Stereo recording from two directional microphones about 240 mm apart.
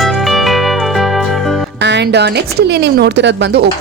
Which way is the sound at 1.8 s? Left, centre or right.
Right.